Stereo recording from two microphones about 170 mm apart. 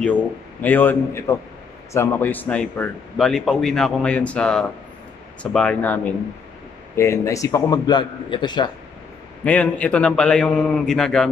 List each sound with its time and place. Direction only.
0.0 s a man's voice: 10° left (ahead or behind)
7.0 s a man's voice: 15° left (ahead or behind)
9.4 s a man's voice: 10° left (ahead or behind)